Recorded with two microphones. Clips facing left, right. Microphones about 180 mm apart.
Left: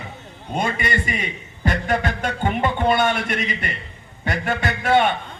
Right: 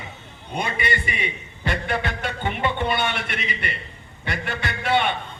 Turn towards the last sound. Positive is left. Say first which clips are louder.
# left 4 dB
turn(degrees=45)  # may be behind; listen again after turning